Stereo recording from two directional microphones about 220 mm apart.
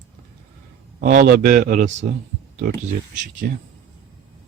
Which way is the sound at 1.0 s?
40° right (ahead or behind).